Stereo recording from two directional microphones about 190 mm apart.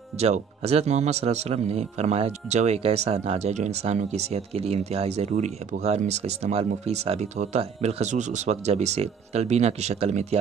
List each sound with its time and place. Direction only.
0.2 s a man's voice: 35° right (ahead or behind)